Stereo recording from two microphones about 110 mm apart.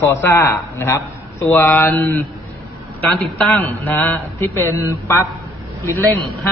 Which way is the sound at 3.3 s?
10° left (ahead or behind).